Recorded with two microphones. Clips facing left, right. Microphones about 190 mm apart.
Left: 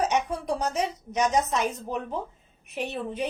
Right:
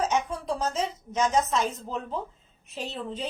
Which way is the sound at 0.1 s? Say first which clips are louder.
Left 1 dB; 15° left (ahead or behind).